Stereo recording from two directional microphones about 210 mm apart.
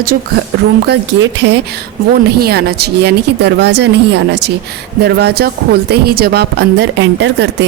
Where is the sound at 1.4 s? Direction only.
50° right (ahead or behind).